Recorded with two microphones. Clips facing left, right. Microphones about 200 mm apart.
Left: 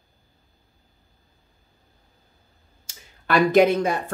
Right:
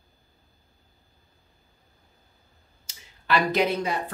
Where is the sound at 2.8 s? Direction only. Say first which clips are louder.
Left 1 dB; 50° left (ahead or behind).